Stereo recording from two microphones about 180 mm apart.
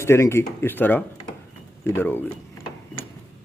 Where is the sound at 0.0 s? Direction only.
15° left (ahead or behind).